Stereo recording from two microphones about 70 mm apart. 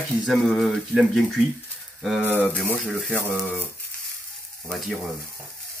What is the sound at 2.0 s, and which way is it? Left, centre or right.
Speech, centre.